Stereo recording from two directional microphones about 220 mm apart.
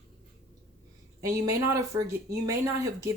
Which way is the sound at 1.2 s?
15° right (ahead or behind).